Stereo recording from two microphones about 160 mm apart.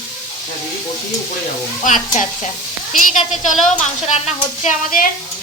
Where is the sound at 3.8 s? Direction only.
40° left (ahead or behind).